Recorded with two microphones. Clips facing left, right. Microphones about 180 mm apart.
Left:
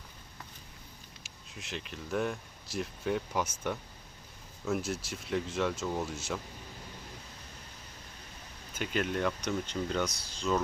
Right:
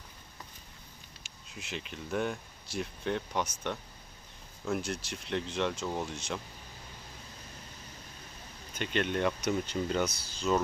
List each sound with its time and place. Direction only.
1.2 s speech: centre (ahead or behind)
8.7 s speech: 5° left (ahead or behind)